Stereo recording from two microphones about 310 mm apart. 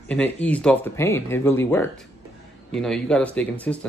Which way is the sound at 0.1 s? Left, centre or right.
Centre.